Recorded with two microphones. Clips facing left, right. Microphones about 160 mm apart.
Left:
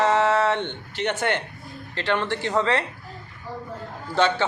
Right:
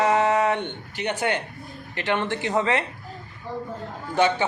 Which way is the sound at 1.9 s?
20° right (ahead or behind).